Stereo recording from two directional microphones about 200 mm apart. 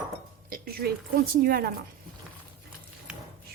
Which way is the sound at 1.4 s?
50° right (ahead or behind).